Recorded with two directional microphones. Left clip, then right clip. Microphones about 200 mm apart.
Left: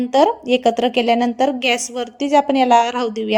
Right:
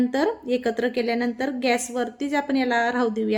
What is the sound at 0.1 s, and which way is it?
A woman's voice, 30° left (ahead or behind).